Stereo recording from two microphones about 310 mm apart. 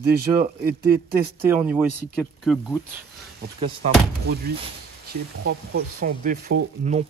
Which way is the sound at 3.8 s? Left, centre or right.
Right.